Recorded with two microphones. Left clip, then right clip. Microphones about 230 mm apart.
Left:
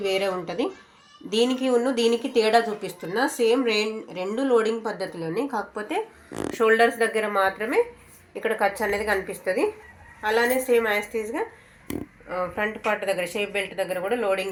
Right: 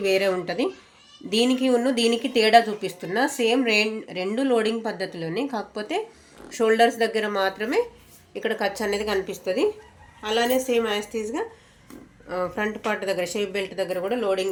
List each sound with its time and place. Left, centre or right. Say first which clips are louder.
0.0 s a woman's voice: right 3 dB; right
9.2 s a woman's voice: even; centre
10.2 s a woman's voice: left 1 dB; right
12.3 s speech: even; right